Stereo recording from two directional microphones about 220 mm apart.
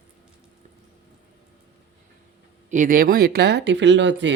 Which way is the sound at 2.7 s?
35° right (ahead or behind).